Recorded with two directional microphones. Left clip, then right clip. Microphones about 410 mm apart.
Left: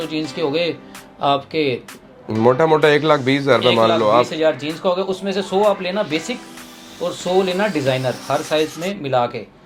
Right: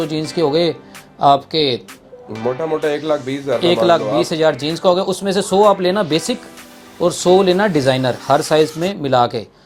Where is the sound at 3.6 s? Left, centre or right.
Right.